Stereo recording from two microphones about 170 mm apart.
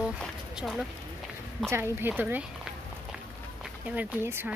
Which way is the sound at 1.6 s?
15° right (ahead or behind).